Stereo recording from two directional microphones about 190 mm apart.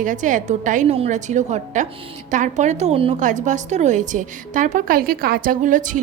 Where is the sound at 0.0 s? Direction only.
40° right (ahead or behind).